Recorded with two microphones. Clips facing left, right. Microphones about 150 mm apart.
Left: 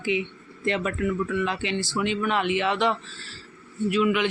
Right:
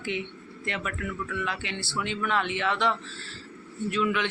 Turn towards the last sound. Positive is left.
turn(degrees=10)  # may be behind; listen again after turning